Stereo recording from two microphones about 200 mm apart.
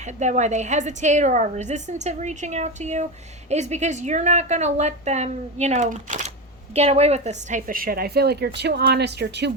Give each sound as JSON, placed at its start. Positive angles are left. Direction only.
{"t": 0.0, "sound": "a woman's voice", "side_deg": -35}